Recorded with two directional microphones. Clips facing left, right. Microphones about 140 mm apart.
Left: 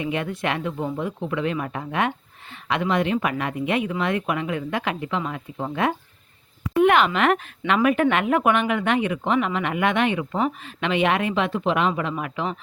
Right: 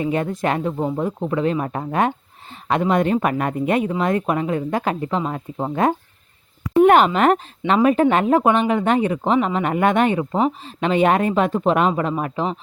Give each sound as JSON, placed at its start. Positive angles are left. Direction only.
{"t": 0.0, "sound": "speech", "side_deg": -40}